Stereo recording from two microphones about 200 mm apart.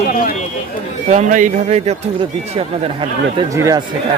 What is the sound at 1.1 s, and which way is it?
Speech, 40° right (ahead or behind).